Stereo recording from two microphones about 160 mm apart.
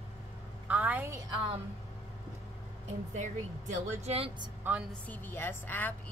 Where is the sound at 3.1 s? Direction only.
50° right (ahead or behind).